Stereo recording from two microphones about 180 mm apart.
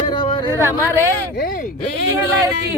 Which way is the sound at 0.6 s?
15° right (ahead or behind).